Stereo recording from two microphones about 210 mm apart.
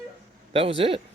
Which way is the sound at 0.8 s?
25° right (ahead or behind).